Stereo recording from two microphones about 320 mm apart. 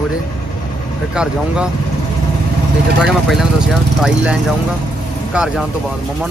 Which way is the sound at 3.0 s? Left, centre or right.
Centre.